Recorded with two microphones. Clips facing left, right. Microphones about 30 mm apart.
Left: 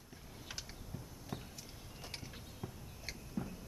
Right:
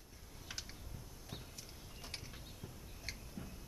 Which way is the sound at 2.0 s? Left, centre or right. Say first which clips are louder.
Left 1 dB; centre.